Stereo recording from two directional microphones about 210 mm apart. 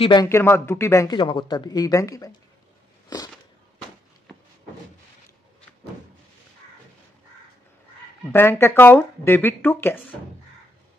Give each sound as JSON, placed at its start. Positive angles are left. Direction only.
{"t": 0.0, "sound": "speech", "side_deg": 20}
{"t": 8.3, "sound": "speech", "side_deg": 10}